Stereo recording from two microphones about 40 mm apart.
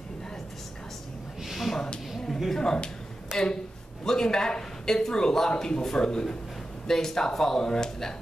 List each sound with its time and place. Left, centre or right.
1.5 s a sound: centre
2.6 s a man's voice: centre
4.0 s a man's voice: centre